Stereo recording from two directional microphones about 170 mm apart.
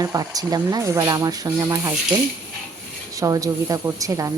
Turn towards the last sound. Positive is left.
turn(degrees=-20)  # may be behind; listen again after turning